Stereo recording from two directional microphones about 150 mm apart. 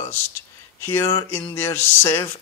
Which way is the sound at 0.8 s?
15° left (ahead or behind).